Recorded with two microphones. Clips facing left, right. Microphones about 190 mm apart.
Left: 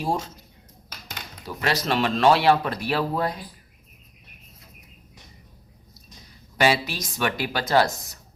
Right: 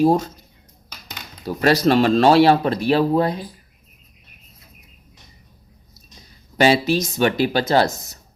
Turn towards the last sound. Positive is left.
turn(degrees=-25)  # may be behind; listen again after turning